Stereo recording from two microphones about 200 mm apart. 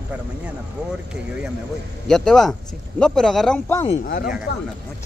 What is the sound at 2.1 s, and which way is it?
A man's voice, centre (ahead or behind).